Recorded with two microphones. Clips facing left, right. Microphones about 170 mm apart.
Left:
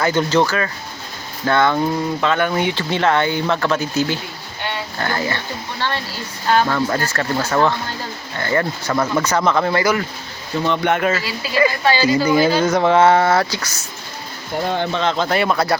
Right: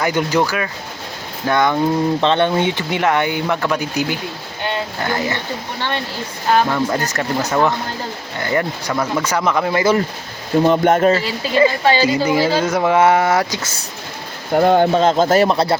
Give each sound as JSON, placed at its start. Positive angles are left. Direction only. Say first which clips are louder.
{"t": 0.0, "sound": "speech", "louder": "left 1 dB", "side_deg": -15}
{"t": 2.2, "sound": "speech", "louder": "right 1 dB", "side_deg": -25}
{"t": 6.5, "sound": "speech", "louder": "right 1 dB", "side_deg": -15}
{"t": 8.9, "sound": "speech", "louder": "left 2 dB", "side_deg": -5}
{"t": 10.6, "sound": "speech", "louder": "right 5 dB", "side_deg": -40}
{"t": 12.6, "sound": "speech", "louder": "even", "side_deg": -5}
{"t": 14.5, "sound": "speech", "louder": "right 8 dB", "side_deg": -50}
{"t": 15.4, "sound": "speech", "louder": "right 2 dB", "side_deg": -30}